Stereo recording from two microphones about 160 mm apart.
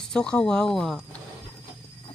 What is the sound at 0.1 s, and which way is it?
Speech, 5° left (ahead or behind).